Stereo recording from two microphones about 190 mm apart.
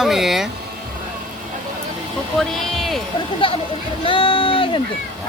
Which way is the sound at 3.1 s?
25° left (ahead or behind).